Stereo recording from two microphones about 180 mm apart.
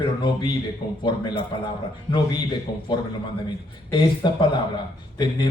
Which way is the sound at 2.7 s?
65° left (ahead or behind).